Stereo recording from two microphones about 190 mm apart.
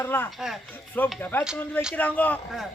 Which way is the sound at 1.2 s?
10° left (ahead or behind).